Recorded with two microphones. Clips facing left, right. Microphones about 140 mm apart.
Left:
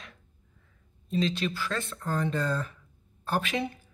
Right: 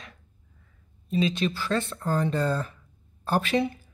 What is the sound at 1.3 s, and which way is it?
Speech, 30° right (ahead or behind).